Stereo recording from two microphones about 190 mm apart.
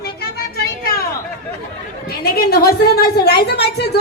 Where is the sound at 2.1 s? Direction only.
55° left (ahead or behind).